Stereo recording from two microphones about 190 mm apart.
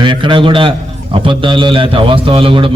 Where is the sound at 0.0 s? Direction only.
25° right (ahead or behind).